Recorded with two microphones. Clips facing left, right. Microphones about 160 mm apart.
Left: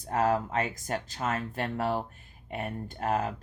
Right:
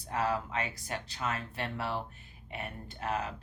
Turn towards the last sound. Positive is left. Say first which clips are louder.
# left 6 dB
turn(degrees=45)  # may be behind; listen again after turning